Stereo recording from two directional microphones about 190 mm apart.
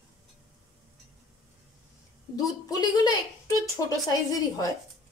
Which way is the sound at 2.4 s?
20° left (ahead or behind).